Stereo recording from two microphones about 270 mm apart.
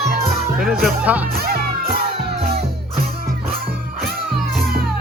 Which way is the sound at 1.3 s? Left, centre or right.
Right.